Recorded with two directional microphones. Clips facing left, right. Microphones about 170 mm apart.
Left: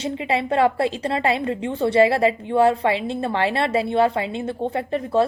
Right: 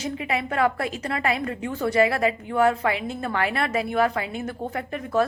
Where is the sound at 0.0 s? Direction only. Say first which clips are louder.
Left 4 dB; 30° left (ahead or behind).